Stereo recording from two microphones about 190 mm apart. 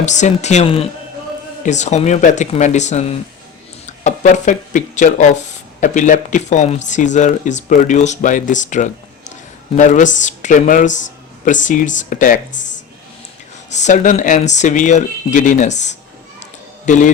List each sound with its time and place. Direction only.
0.0 s speech: 40° left (ahead or behind)
13.7 s a man's voice: 40° left (ahead or behind)